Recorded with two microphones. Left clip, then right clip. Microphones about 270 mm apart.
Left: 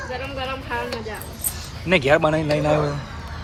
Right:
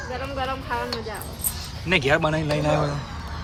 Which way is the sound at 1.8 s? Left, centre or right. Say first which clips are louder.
Left 4 dB; centre.